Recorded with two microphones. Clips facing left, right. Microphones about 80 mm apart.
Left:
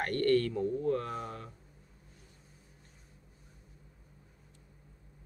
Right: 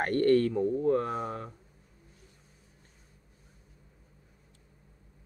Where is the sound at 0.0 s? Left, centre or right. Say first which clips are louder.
Right 4 dB; right.